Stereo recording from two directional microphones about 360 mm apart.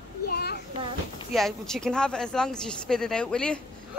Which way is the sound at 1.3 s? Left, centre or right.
Centre.